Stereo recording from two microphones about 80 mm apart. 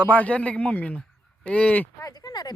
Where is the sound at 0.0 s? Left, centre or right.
Centre.